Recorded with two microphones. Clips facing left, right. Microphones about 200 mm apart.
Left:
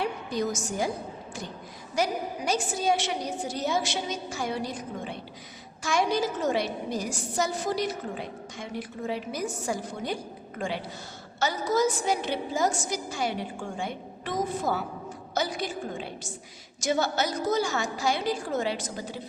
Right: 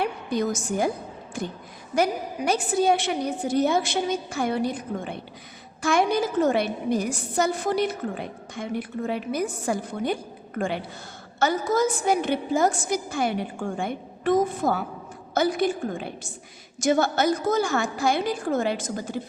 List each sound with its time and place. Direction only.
0.0 s a woman's voice: 60° right (ahead or behind)
2.0 s a woman's voice: 60° right (ahead or behind)
11.3 s a woman's voice: 55° right (ahead or behind)